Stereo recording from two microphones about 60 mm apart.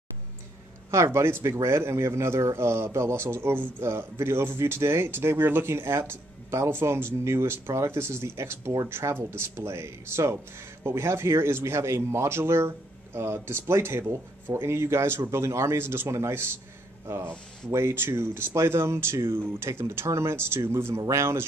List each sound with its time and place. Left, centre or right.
0.9 s speech: right